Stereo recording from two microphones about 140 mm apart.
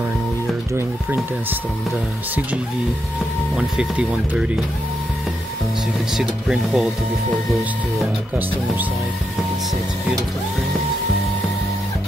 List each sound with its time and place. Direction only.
0.7 s speech: 15° right (ahead or behind)
3.5 s speech: 5° right (ahead or behind)
6.1 s speech: 5° right (ahead or behind)